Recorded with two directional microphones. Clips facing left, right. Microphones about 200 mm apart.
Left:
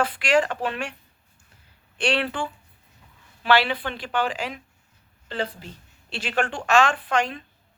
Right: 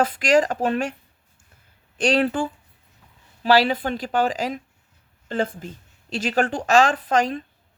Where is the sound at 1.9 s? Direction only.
40° right (ahead or behind).